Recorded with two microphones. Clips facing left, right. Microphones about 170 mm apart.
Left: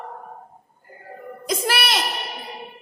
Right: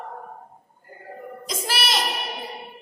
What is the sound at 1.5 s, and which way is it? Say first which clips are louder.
Child singing: left 5 dB; 60° left (ahead or behind).